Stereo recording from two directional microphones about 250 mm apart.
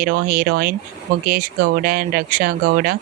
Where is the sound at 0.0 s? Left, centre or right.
Right.